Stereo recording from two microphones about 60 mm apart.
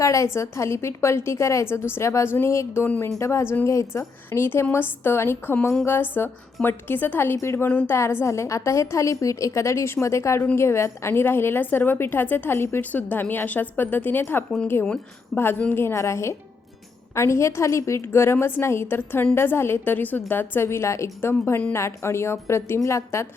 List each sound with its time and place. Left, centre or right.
0.0 s a woman's voice: left
0.3 s a woman's voice: left
4.3 s a woman's voice: left
7.4 s a woman's voice: left
12.8 s a woman's voice: left
15.3 s a woman's voice: left
15.7 s a woman's voice: left
18.0 s a woman's voice: left
20.7 s a woman's voice: left